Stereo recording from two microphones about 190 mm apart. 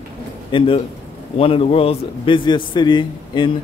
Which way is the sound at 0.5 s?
25° left (ahead or behind).